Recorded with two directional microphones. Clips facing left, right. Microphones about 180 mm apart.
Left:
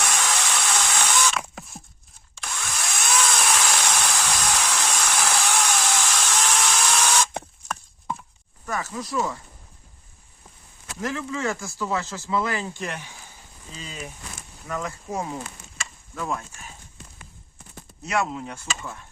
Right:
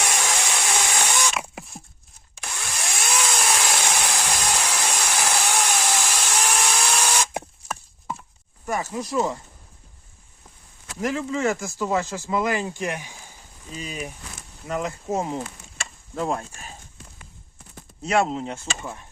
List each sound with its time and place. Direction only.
0.0 s a sound: 15° right (ahead or behind)
2.4 s power tool: 10° right (ahead or behind)
5.2 s a sound: 10° right (ahead or behind)
8.7 s speech: 20° right (ahead or behind)
11.0 s speech: 20° right (ahead or behind)
15.8 s chop: 30° right (ahead or behind)
18.0 s speech: 30° right (ahead or behind)